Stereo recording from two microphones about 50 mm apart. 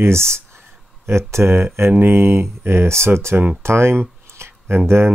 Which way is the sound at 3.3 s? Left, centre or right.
Right.